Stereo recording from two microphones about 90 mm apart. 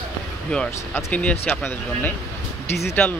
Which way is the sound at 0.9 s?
15° left (ahead or behind).